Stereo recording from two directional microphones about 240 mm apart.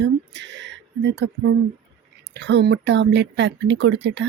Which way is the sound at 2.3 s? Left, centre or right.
Right.